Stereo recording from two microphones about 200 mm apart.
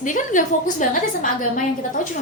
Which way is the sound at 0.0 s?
40° left (ahead or behind).